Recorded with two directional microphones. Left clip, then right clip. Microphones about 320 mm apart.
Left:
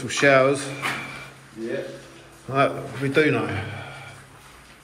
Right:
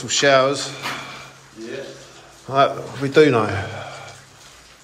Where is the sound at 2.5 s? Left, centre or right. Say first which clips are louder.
Right 4 dB; centre.